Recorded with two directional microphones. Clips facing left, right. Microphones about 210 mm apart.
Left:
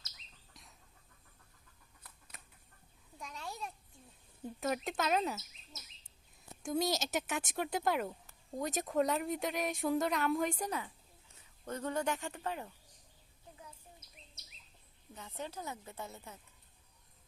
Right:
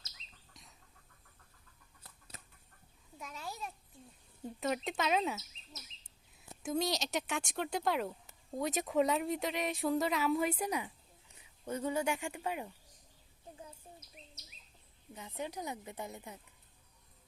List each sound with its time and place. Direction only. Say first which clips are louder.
0.5 s chicken: even; centre (ahead or behind)
2.0 s chicken: right 3 dB; 25° right (ahead or behind)
3.2 s babbling: even; centre (ahead or behind)
4.4 s speech: even; centre (ahead or behind)
6.6 s speech: even; centre (ahead or behind)
15.1 s speech: right 2 dB; 10° right (ahead or behind)